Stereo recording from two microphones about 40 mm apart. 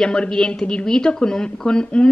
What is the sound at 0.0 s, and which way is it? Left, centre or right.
A woman's voice, centre.